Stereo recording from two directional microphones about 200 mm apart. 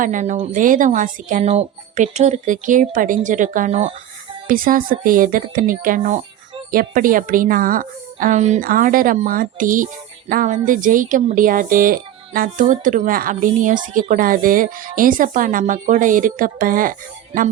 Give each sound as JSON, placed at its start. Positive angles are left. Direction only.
{"t": 0.0, "sound": "a woman's voice", "side_deg": -40}